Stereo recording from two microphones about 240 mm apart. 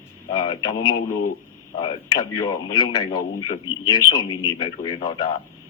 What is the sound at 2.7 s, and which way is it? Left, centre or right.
A man's voice, centre.